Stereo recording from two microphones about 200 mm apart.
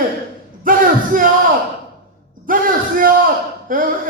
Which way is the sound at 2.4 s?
45° right (ahead or behind).